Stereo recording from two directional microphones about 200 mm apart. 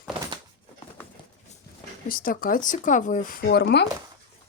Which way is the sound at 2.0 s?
45° left (ahead or behind).